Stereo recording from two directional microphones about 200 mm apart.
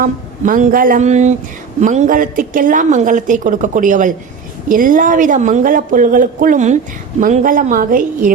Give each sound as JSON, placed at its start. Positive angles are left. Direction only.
{"t": 0.0, "sound": "a woman's voice", "side_deg": -40}